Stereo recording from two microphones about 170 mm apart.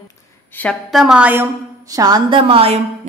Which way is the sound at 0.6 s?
5° left (ahead or behind).